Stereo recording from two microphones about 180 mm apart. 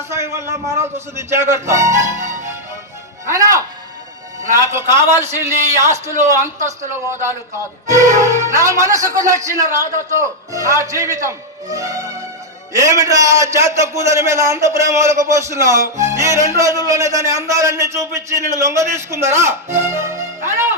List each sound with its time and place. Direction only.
0.1 s a man's voice: 15° right (ahead or behind)